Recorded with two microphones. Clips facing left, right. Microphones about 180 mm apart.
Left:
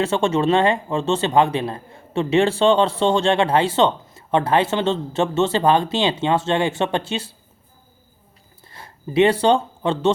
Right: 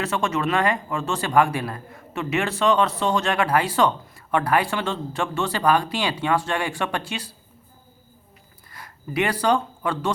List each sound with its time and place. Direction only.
0.0 s speech: 30° left (ahead or behind)
8.7 s speech: 25° left (ahead or behind)